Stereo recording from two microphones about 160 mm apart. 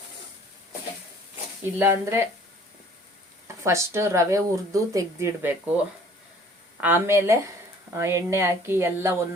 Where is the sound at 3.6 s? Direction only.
20° right (ahead or behind).